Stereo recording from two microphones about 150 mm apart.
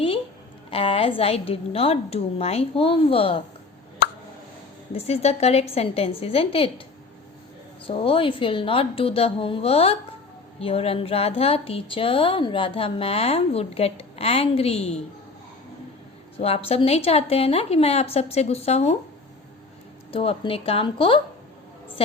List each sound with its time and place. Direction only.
0.7 s a woman's voice: 40° left (ahead or behind)
4.9 s a woman's voice: 45° left (ahead or behind)
7.9 s a woman's voice: 35° left (ahead or behind)
16.4 s a woman's voice: 40° left (ahead or behind)
20.1 s a woman's voice: 35° left (ahead or behind)